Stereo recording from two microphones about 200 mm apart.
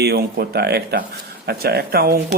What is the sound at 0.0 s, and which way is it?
Speech, 50° right (ahead or behind).